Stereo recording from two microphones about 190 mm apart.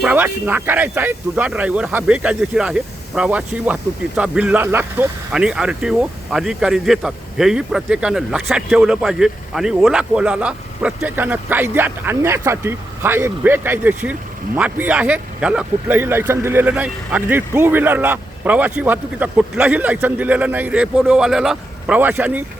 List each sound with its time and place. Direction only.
0.0 s speech: 10° right (ahead or behind)